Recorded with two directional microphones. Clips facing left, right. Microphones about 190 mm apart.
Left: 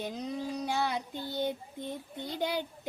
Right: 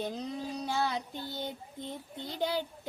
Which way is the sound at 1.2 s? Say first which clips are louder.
Left 5 dB; 15° left (ahead or behind).